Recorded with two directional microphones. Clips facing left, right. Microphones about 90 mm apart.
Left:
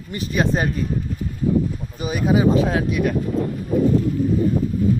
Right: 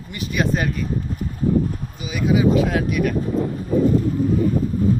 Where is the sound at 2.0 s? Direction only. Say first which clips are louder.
Left 1 dB; 40° left (ahead or behind).